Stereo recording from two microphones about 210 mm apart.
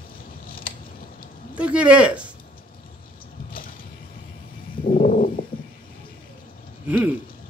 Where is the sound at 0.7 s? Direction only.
45° left (ahead or behind).